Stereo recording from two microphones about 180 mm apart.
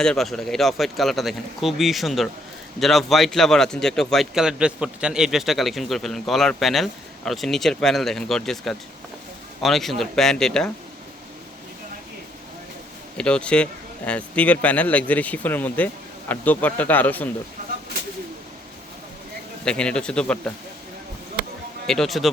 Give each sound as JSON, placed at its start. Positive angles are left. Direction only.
{"t": 0.0, "sound": "speech", "side_deg": 0}
{"t": 13.1, "sound": "a man's voice", "side_deg": 5}
{"t": 19.6, "sound": "speech", "side_deg": 5}
{"t": 21.8, "sound": "speech", "side_deg": 0}